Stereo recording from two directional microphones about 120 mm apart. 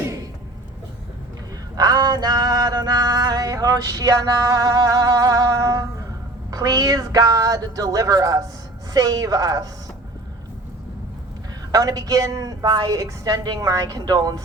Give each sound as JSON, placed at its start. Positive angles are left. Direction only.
{"t": 1.7, "sound": "a sound", "side_deg": -35}
{"t": 6.5, "sound": "a woman's voice", "side_deg": -30}
{"t": 11.7, "sound": "a woman's voice", "side_deg": -30}